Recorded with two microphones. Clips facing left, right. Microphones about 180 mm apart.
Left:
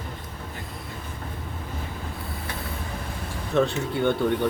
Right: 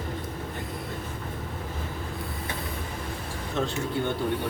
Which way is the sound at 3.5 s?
65° left (ahead or behind).